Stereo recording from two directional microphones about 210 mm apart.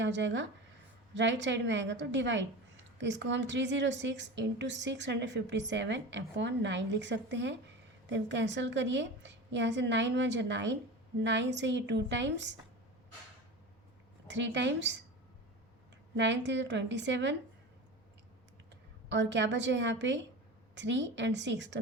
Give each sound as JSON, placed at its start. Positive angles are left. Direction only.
{"t": 0.0, "sound": "a woman's voice", "side_deg": -60}
{"t": 14.3, "sound": "a woman's voice", "side_deg": -55}
{"t": 16.1, "sound": "a woman's voice", "side_deg": -60}
{"t": 18.7, "sound": "a woman's voice", "side_deg": -60}